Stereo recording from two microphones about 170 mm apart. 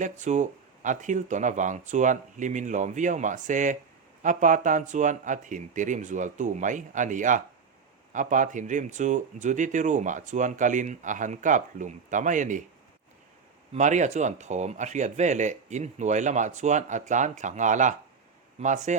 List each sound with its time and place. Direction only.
0.0 s speech: 45° right (ahead or behind)
13.7 s speech: 45° right (ahead or behind)